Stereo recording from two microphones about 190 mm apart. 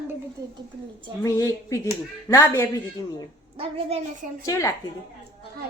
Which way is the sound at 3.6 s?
35° right (ahead or behind).